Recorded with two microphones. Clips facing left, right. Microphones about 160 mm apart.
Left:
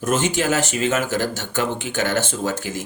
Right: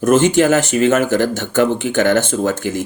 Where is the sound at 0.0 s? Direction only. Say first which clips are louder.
Right 9 dB; 60° right (ahead or behind).